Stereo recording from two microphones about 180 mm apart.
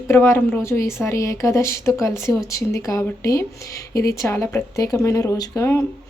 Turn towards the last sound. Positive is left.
turn(degrees=15)  # may be behind; listen again after turning